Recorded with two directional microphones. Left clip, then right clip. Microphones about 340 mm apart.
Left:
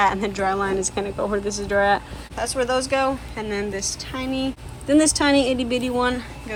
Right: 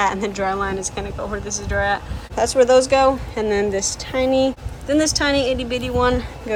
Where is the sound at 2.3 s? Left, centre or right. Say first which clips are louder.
Right 9 dB; centre.